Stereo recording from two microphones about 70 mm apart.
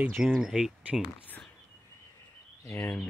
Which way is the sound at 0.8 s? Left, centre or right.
Centre.